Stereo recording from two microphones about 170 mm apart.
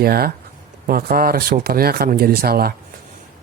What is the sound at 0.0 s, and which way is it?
Speech, 65° right (ahead or behind).